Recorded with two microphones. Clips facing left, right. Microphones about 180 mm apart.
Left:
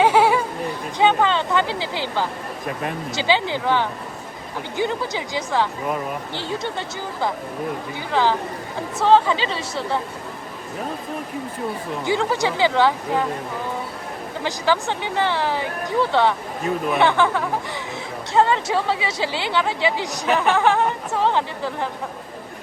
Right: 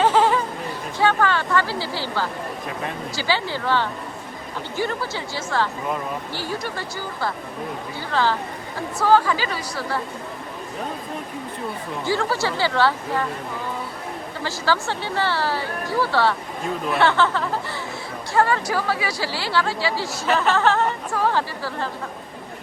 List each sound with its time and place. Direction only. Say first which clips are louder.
0.0 s a sound: left 2 dB; 10° left (ahead or behind)
3.2 s speech: left 4 dB; 20° left (ahead or behind)
12.0 s speech: left 2 dB; 20° left (ahead or behind)
14.4 s speech: left 2 dB; 15° left (ahead or behind)